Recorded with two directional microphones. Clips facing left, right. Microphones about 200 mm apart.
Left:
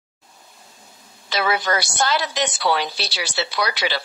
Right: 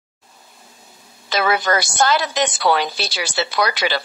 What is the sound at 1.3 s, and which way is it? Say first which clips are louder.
A woman's voice: right 3 dB; 50° right (ahead or behind).